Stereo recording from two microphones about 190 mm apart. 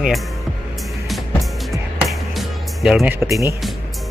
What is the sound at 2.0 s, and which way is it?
Music, centre (ahead or behind).